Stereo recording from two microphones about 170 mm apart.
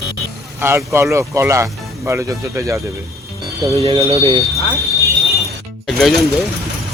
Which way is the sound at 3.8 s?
35° right (ahead or behind).